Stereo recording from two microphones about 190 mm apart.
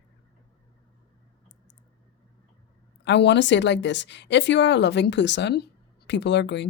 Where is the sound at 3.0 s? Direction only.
65° left (ahead or behind).